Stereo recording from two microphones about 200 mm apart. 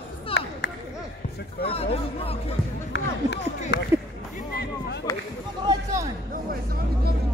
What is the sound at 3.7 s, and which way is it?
Speech, 55° left (ahead or behind).